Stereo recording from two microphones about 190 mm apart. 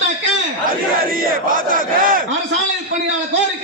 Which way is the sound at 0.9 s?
50° right (ahead or behind).